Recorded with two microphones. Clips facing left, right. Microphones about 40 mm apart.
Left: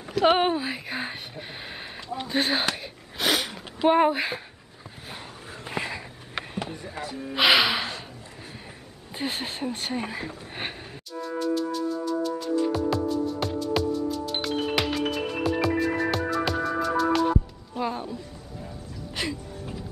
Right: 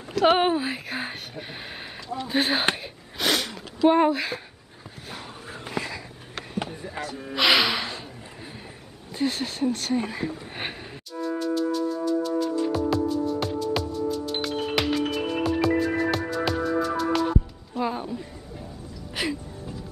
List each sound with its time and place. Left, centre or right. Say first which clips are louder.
0.1 s speech: right 1 dB; centre
3.2 s a sound: even; centre
4.1 s speech: even; centre
5.7 s sniff: even; left
6.6 s music: right 1 dB; centre
7.3 s speech: left 1 dB; centre
9.1 s a sound: right 4 dB; left; by 17.3 s centre
17.7 s music: right 2 dB; centre
19.2 s a sound: right 2 dB; centre